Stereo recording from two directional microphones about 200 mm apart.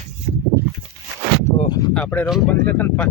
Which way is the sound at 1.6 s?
20° left (ahead or behind).